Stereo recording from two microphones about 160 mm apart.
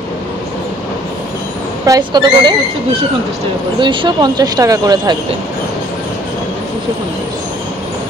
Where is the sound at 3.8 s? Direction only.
30° right (ahead or behind).